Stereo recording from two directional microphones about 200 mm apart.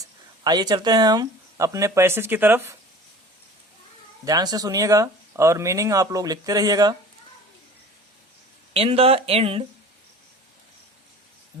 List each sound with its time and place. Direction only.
0.0 s speech: 20° right (ahead or behind)
4.3 s speech: 20° right (ahead or behind)
8.7 s speech: 30° right (ahead or behind)